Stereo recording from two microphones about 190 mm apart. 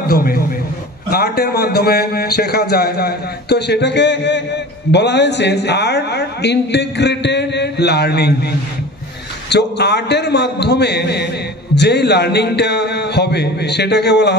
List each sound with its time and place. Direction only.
0.0 s a man's voice: 50° left (ahead or behind)
9.5 s a man's voice: 60° left (ahead or behind)